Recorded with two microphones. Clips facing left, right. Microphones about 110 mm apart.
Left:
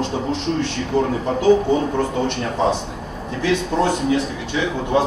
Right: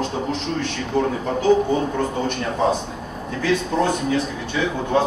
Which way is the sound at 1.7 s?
25° left (ahead or behind).